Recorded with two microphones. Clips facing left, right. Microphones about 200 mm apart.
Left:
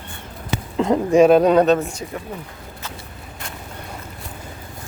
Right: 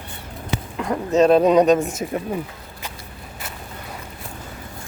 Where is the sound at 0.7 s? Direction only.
25° left (ahead or behind).